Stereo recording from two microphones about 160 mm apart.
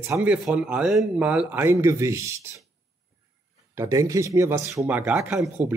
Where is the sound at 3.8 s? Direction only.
20° right (ahead or behind).